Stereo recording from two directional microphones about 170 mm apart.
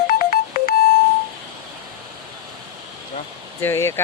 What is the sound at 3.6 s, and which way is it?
Speech, 15° left (ahead or behind).